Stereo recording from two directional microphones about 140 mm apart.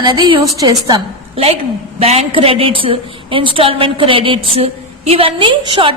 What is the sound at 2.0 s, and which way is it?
A woman's voice, 45° right (ahead or behind).